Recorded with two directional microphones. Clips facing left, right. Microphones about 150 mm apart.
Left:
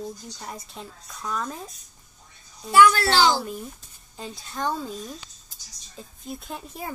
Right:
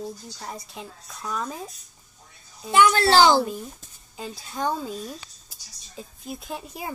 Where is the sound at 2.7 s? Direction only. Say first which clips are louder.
Left 2 dB; 20° right (ahead or behind).